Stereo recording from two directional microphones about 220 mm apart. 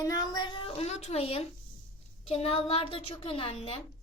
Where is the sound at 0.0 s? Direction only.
15° left (ahead or behind).